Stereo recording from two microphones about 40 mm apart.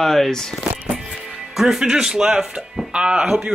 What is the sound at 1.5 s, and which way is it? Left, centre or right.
A man's voice, centre.